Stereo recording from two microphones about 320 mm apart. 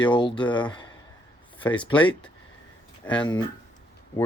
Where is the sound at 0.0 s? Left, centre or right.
Centre.